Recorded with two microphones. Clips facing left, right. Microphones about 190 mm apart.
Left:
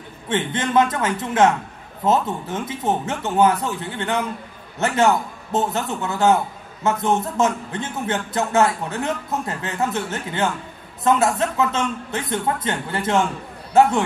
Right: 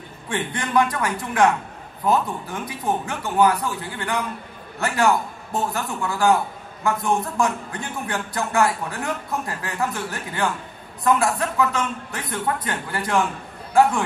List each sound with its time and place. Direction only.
0.3 s a man's voice: 20° left (ahead or behind)